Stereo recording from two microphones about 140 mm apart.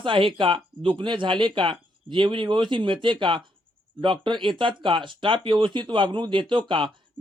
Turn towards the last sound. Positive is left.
turn(degrees=-35)  # may be behind; listen again after turning